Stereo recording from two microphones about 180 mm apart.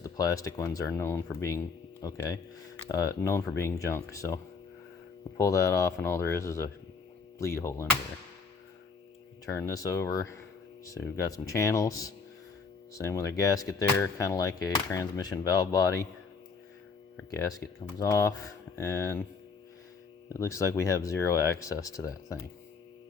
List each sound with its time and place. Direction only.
0.0 s speech: 20° left (ahead or behind)
5.4 s speech: 15° left (ahead or behind)
9.5 s speech: 15° left (ahead or behind)
17.9 s speech: 20° left (ahead or behind)
20.3 s speech: 15° left (ahead or behind)